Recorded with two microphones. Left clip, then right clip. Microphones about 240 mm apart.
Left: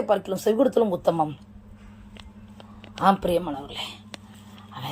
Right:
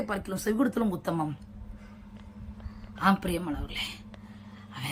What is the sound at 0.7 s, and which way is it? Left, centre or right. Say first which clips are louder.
Speech: left 9 dB; centre.